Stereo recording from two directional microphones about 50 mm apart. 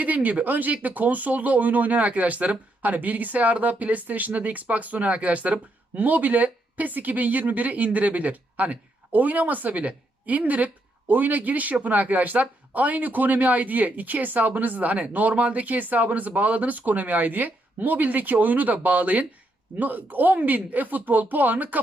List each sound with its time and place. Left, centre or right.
0.0 s speech: right